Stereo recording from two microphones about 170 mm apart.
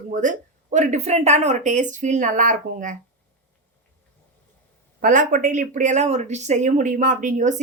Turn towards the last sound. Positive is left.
turn(degrees=-45)  # may be behind; listen again after turning